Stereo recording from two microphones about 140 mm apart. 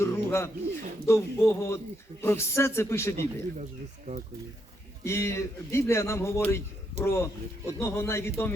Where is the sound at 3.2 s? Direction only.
55° right (ahead or behind).